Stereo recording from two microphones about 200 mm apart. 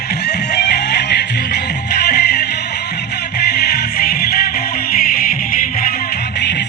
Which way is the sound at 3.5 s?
50° left (ahead or behind).